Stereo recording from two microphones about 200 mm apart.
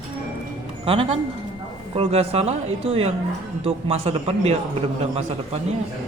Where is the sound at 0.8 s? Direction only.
30° right (ahead or behind).